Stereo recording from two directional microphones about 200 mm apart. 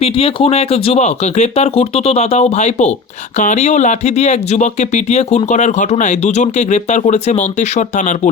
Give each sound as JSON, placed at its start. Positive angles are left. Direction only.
{"t": 0.0, "sound": "speech", "side_deg": 30}